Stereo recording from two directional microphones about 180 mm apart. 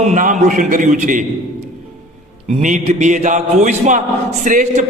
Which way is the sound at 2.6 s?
45° right (ahead or behind).